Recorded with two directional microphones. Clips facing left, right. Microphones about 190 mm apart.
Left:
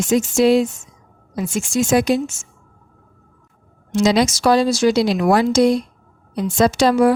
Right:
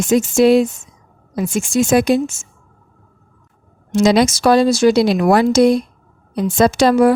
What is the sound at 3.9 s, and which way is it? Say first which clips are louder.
Speech: right 3 dB; 55° right (ahead or behind).